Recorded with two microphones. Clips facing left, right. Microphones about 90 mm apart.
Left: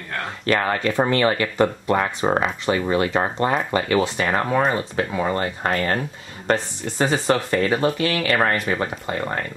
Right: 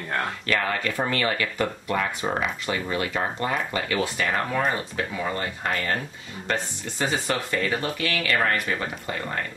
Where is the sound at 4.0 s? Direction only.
25° left (ahead or behind).